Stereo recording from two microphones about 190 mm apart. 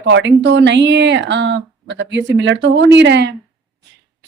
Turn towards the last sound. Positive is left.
turn(degrees=-65)  # may be behind; listen again after turning